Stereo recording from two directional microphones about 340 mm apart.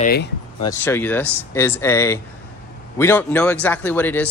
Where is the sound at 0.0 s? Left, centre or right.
Left.